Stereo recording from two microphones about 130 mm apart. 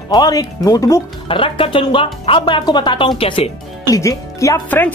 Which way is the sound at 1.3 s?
45° left (ahead or behind).